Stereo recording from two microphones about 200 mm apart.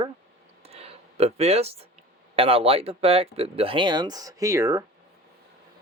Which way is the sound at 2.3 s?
30° right (ahead or behind).